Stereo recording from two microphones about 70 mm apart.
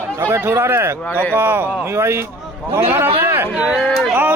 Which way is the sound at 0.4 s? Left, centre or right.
Right.